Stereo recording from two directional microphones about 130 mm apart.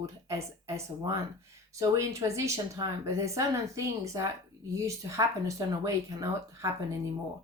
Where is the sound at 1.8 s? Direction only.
25° right (ahead or behind).